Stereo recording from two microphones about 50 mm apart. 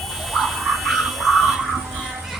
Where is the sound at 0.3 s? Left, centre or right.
Centre.